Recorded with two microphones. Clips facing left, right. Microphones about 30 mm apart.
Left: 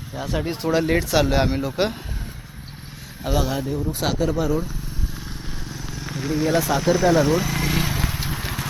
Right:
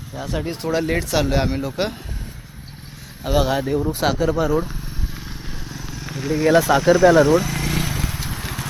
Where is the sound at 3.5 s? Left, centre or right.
Right.